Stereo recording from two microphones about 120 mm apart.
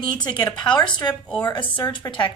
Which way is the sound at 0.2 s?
40° left (ahead or behind).